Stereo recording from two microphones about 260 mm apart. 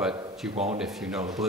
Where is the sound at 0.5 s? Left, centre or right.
Right.